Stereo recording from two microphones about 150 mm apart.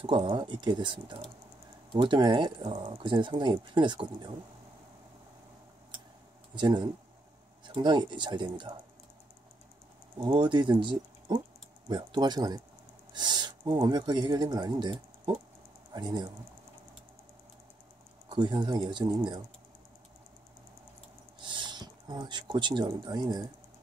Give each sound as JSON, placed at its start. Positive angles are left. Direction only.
{"t": 0.0, "sound": "speech", "side_deg": -35}
{"t": 6.5, "sound": "speech", "side_deg": -30}
{"t": 10.1, "sound": "speech", "side_deg": -30}
{"t": 18.3, "sound": "speech", "side_deg": -30}
{"t": 21.4, "sound": "speech", "side_deg": -30}